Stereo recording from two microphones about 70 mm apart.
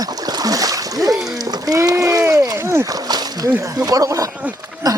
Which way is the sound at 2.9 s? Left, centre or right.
Right.